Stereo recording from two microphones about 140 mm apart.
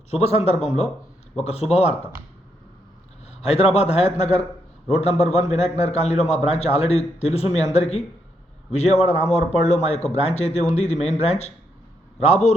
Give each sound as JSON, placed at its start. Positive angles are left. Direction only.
{"t": 0.1, "sound": "speech", "side_deg": 50}
{"t": 3.2, "sound": "speech", "side_deg": 50}